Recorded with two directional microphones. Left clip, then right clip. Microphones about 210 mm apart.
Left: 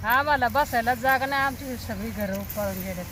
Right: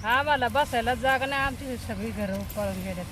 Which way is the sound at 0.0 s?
15° right (ahead or behind).